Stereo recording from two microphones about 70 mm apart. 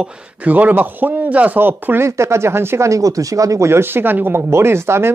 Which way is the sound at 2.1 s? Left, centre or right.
Right.